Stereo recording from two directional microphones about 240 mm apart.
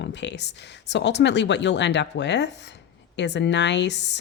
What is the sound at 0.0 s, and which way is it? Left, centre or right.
Speech, left.